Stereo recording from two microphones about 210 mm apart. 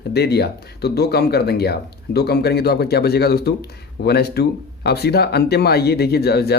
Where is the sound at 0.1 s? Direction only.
50° left (ahead or behind).